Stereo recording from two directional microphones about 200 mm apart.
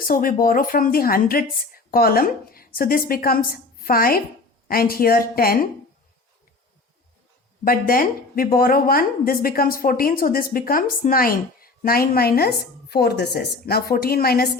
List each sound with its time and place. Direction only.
0.1 s speech: 45° left (ahead or behind)
7.6 s speech: 45° left (ahead or behind)